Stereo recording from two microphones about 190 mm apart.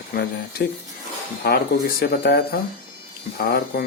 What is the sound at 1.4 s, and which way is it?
Speech, 55° left (ahead or behind).